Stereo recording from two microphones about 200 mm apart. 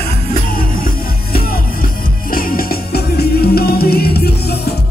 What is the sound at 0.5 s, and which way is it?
Music, 45° left (ahead or behind).